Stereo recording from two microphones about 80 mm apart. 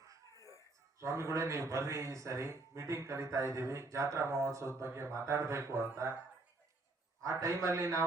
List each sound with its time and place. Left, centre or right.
0.3 s a sound: left
0.9 s a man's voice: right
7.3 s a man's voice: right